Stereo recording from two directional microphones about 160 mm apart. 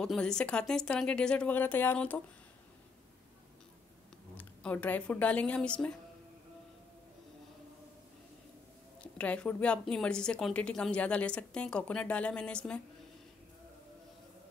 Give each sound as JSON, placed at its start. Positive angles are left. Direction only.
{"t": 0.0, "sound": "a woman's voice", "side_deg": 5}
{"t": 4.4, "sound": "a woman's voice", "side_deg": 10}
{"t": 9.0, "sound": "a woman's voice", "side_deg": 5}